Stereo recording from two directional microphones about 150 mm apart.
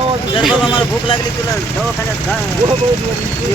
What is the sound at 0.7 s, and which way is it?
Speech, 35° left (ahead or behind).